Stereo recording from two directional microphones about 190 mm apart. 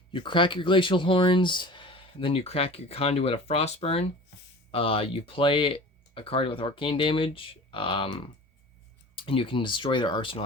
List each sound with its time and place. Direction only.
0.1 s speech: 25° left (ahead or behind)